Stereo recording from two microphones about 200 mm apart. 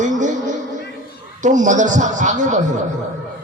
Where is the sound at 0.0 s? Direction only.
40° right (ahead or behind).